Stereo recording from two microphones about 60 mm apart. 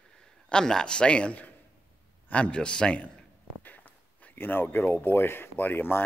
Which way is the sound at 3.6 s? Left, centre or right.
Left.